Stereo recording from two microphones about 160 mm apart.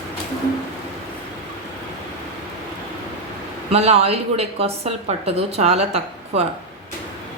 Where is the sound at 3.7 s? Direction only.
40° right (ahead or behind).